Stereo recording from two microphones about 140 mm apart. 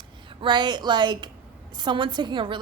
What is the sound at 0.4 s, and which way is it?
A woman's voice, 30° right (ahead or behind).